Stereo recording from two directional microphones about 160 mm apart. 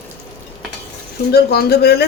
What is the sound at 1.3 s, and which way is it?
Speech, 80° left.